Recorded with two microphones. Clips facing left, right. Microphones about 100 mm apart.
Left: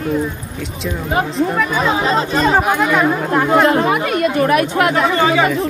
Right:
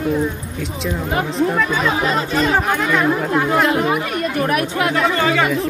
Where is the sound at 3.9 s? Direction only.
80° left.